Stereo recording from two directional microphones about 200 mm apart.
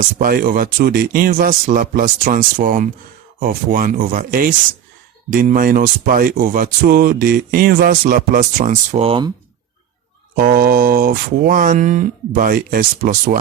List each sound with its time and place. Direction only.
0.2 s speech: 45° right (ahead or behind); by 9.3 s 25° right (ahead or behind)
10.3 s speech: 45° right (ahead or behind)